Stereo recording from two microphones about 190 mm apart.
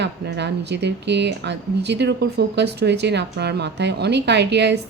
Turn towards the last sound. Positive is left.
turn(degrees=-65)  # may be behind; listen again after turning